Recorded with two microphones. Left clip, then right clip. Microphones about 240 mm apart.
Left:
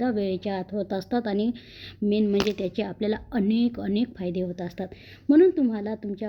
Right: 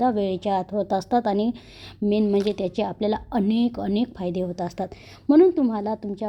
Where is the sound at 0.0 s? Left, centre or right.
Right.